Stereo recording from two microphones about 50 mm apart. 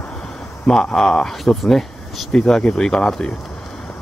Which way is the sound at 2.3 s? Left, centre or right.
Centre.